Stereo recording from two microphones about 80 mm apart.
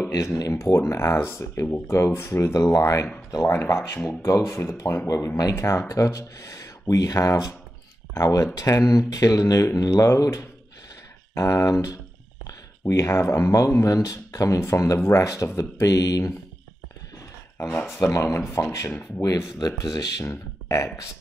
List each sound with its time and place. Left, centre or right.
0.1 s speech: left
18.5 s speech: left
18.9 s speech: left
19.2 s speech: left
20.2 s speech: left